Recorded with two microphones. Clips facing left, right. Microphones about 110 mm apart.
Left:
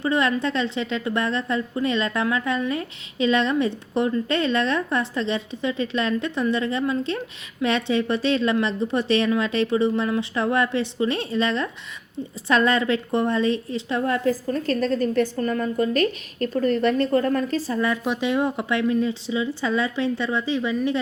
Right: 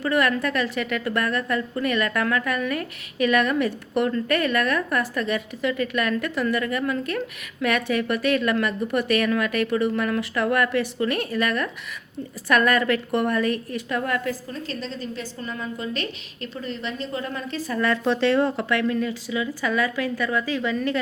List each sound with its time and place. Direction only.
0.0 s a woman's voice: 25° left (ahead or behind)
14.5 s a woman's voice: 50° left (ahead or behind)
17.7 s a woman's voice: 15° left (ahead or behind)